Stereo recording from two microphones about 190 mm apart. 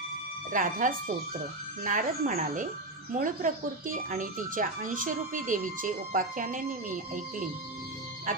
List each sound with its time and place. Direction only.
0.5 s speech: 45° right (ahead or behind)